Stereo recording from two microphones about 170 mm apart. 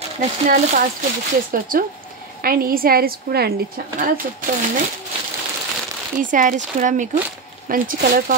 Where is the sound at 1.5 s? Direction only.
55° right (ahead or behind).